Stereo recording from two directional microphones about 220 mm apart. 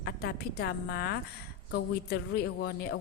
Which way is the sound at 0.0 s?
45° left (ahead or behind).